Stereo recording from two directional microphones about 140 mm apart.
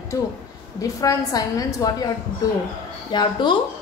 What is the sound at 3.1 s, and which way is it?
Speech, 35° left (ahead or behind).